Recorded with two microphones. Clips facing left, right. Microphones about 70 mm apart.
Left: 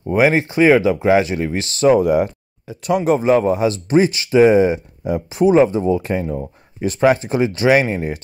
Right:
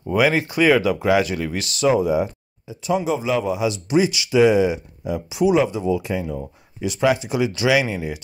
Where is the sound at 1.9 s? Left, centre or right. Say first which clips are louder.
Left 5 dB; left.